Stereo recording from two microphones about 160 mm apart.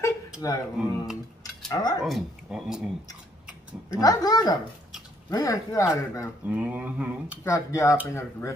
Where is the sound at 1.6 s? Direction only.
25° left (ahead or behind).